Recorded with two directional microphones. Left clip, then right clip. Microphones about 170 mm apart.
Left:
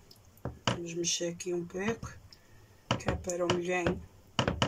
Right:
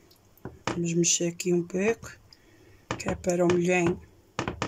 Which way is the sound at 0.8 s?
75° right (ahead or behind).